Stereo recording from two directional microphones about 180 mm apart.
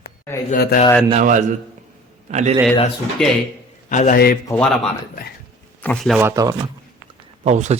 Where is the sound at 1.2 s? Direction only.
45° right (ahead or behind).